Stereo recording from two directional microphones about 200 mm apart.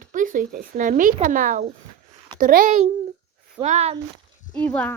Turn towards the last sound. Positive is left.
turn(degrees=5)  # may be behind; listen again after turning